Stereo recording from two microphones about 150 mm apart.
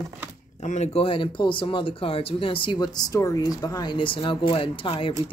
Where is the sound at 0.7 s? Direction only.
50° left (ahead or behind).